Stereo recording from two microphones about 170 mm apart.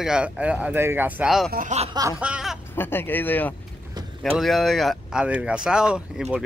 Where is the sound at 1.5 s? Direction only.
45° right (ahead or behind).